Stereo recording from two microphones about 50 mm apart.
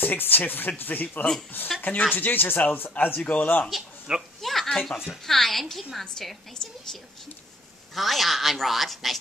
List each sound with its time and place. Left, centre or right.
0.0 s speech: left
3.7 s a sound: centre
4.6 s a woman's voice: centre